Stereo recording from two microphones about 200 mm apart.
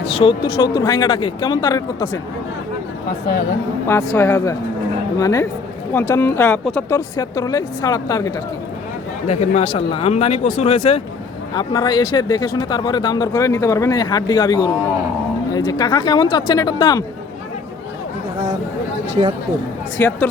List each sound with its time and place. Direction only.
0.1 s speech: 25° left (ahead or behind)
3.8 s speech: 15° left (ahead or behind)
9.2 s speech: 35° left (ahead or behind)
11.5 s speech: 20° left (ahead or behind)
20.0 s speech: 15° left (ahead or behind)